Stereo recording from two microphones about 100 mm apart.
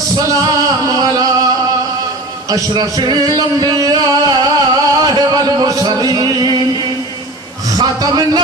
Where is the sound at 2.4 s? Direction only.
40° right (ahead or behind).